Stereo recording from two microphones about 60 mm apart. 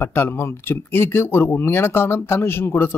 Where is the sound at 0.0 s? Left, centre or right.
Left.